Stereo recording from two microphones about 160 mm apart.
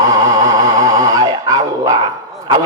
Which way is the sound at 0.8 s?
25° right (ahead or behind).